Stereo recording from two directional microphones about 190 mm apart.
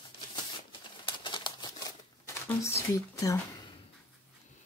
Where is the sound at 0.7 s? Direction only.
25° left (ahead or behind).